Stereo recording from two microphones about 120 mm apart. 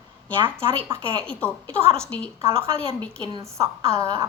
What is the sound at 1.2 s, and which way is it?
Speech, 10° left (ahead or behind).